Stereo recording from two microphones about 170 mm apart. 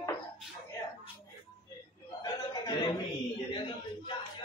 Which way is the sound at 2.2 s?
25° left (ahead or behind).